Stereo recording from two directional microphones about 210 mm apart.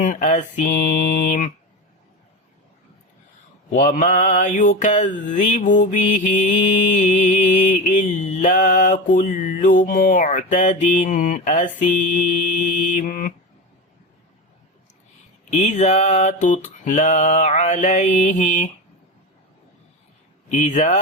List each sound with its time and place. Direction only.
0.0 s mantra: 35° left (ahead or behind)
3.8 s mantra: 40° left (ahead or behind)
13.0 s mantra: 40° left (ahead or behind)
15.4 s mantra: 35° left (ahead or behind)
20.5 s mantra: 35° left (ahead or behind)